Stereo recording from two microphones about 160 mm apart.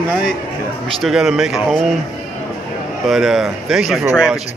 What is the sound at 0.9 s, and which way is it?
Speech, centre (ahead or behind).